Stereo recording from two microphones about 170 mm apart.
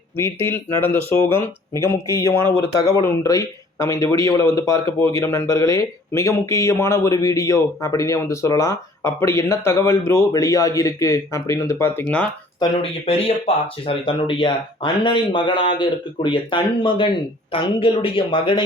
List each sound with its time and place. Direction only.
0.2 s speech: 15° left (ahead or behind)
12.5 s speech: 30° left (ahead or behind)